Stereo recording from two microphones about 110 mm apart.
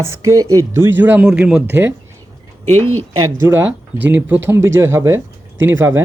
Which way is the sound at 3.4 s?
20° right (ahead or behind).